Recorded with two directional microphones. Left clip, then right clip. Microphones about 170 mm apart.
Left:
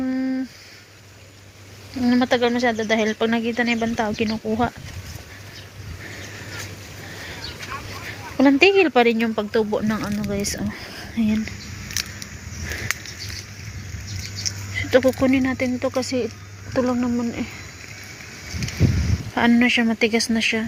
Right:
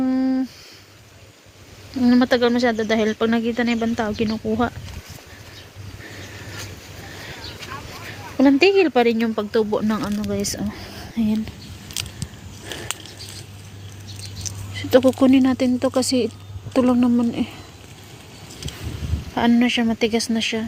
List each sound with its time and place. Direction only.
0.0 s a sound: 50° right (ahead or behind)
2.0 s speech: 50° right (ahead or behind)
8.0 s speech: 20° right (ahead or behind)
14.8 s a sound: 40° right (ahead or behind)
15.2 s speech: 50° right (ahead or behind)
19.3 s speech: 25° right (ahead or behind)